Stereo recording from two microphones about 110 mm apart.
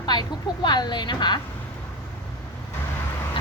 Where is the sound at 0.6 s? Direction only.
40° left (ahead or behind).